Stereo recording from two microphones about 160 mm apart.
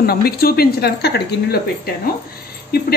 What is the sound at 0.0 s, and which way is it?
Speech, 75° left (ahead or behind).